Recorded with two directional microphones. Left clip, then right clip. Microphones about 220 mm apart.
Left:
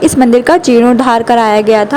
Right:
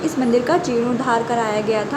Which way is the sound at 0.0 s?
40° left (ahead or behind).